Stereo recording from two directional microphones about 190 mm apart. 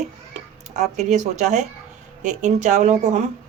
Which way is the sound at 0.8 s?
40° right (ahead or behind).